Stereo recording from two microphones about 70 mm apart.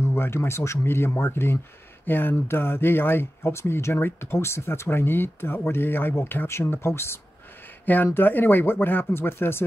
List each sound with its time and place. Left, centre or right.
0.0 s speech: left
7.8 s speech: left